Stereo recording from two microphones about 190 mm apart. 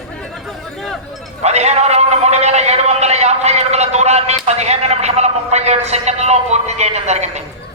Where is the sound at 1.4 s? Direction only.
35° right (ahead or behind).